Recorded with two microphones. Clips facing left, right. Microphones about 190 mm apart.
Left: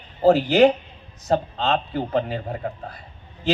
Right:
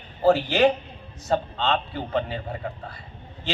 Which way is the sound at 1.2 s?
35° left (ahead or behind).